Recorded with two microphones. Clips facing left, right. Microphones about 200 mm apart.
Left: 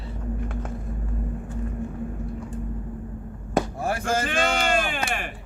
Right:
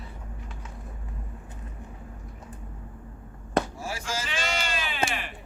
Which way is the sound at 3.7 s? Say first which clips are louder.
Left 8 dB; 55° left (ahead or behind).